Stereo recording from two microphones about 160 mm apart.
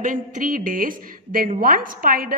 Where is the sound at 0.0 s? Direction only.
55° right (ahead or behind).